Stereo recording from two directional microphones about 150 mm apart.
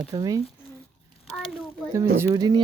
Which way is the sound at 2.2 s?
25° right (ahead or behind).